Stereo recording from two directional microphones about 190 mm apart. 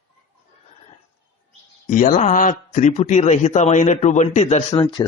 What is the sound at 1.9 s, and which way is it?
Speech, 45° left (ahead or behind).